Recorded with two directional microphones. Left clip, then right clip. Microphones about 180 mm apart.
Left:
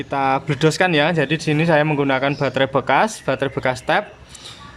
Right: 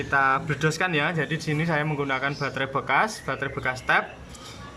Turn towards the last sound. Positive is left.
turn(degrees=20)  # may be behind; listen again after turning